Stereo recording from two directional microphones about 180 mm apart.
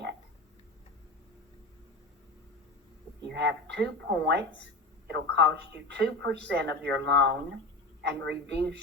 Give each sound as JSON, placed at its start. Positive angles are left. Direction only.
{"t": 3.2, "sound": "a woman's voice", "side_deg": -70}